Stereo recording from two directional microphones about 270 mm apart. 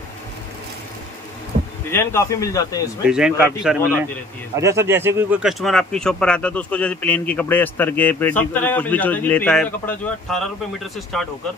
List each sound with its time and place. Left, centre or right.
1.5 s heart sounds: right
1.9 s a man's voice: centre
3.1 s speech: centre